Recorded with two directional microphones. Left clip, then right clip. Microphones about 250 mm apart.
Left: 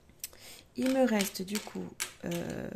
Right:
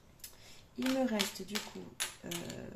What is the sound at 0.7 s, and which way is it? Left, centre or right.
Speech, left.